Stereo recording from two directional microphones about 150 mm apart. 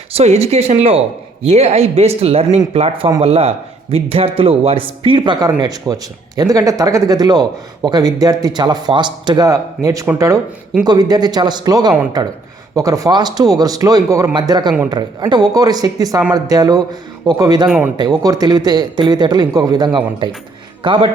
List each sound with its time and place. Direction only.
0.1 s speech: 45° right (ahead or behind); by 17.7 s 25° right (ahead or behind)
17.7 s a man's voice: 10° right (ahead or behind)
17.9 s speech: 30° right (ahead or behind)